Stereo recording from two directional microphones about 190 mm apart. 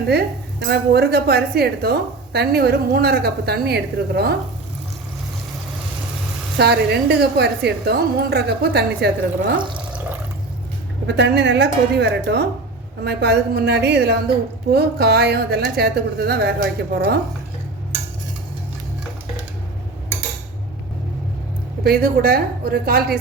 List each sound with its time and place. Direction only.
0.1 s a woman's voice: 60° right (ahead or behind)
6.6 s a woman's voice: 60° right (ahead or behind)
9.6 s speech: 25° right (ahead or behind)
11.0 s a woman's voice: 65° right (ahead or behind)
21.8 s a woman's voice: 55° right (ahead or behind)